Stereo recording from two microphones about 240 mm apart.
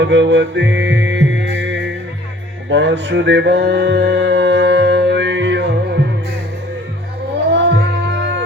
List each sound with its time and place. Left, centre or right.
0.0 s music: right
7.5 s music: right